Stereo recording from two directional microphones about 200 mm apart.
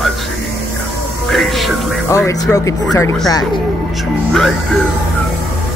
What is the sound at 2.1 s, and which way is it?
Speech, 15° left (ahead or behind).